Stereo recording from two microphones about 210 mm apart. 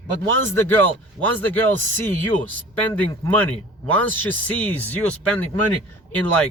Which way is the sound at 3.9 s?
5° left (ahead or behind).